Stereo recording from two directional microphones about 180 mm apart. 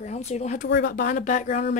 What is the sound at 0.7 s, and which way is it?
A woman's voice, 55° left (ahead or behind).